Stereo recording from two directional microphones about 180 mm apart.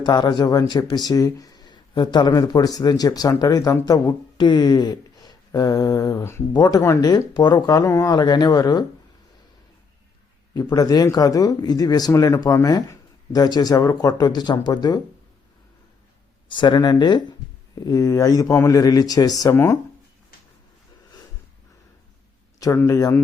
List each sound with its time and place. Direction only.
0.0 s speech: 25° left (ahead or behind)
10.5 s speech: 20° left (ahead or behind)
16.5 s speech: 25° left (ahead or behind)
22.6 s speech: 15° left (ahead or behind)